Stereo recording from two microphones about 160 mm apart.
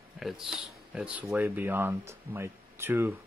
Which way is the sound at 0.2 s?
Centre (ahead or behind).